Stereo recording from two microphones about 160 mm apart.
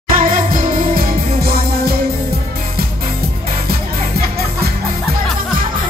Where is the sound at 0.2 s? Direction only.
60° right (ahead or behind).